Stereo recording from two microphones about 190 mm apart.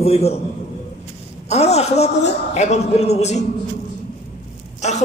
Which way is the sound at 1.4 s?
35° left (ahead or behind).